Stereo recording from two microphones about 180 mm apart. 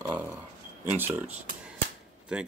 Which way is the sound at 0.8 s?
10° right (ahead or behind).